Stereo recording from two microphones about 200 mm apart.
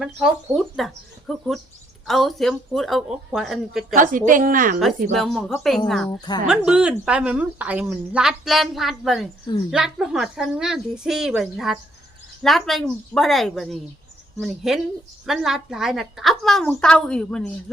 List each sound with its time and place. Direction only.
0.0 s a woman's voice: centre (ahead or behind)
1.3 s bird: centre (ahead or behind)
2.0 s a woman's voice: centre (ahead or behind)
3.9 s a woman's voice: 40° right (ahead or behind)
5.1 s a woman's voice: centre (ahead or behind)
6.1 s a woman's voice: 20° left (ahead or behind)
6.5 s a woman's voice: 5° right (ahead or behind)